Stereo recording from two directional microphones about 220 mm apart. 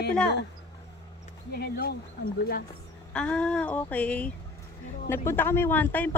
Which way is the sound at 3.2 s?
5° left (ahead or behind).